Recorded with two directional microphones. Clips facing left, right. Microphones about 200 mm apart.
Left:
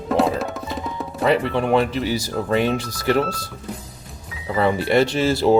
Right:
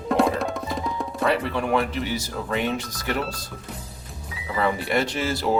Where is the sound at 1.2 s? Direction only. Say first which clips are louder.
Left 5 dB; 25° left (ahead or behind).